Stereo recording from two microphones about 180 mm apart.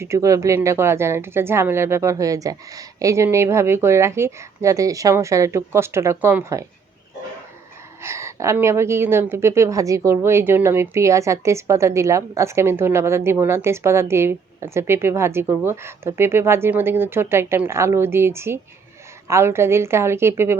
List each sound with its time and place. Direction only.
0.0 s a woman's voice: 15° right (ahead or behind)
8.0 s a woman's voice: 15° right (ahead or behind)